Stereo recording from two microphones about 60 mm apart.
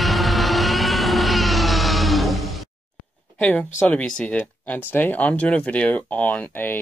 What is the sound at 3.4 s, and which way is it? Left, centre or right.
Speech, left.